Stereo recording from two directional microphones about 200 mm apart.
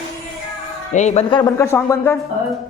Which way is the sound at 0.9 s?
35° left (ahead or behind).